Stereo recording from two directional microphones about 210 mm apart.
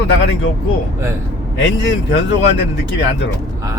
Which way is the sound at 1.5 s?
60° left (ahead or behind).